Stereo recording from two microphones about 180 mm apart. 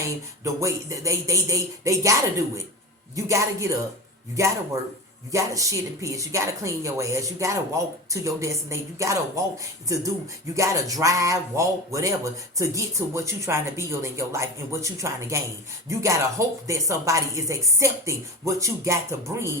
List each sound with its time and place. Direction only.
0.4 s speech: 15° right (ahead or behind)
3.2 s speech: 15° right (ahead or behind)